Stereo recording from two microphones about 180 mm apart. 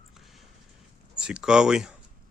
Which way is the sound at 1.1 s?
5° right (ahead or behind).